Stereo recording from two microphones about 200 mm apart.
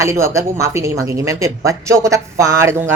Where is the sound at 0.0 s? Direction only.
15° right (ahead or behind).